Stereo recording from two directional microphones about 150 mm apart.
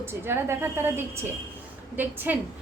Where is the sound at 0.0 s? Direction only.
15° right (ahead or behind).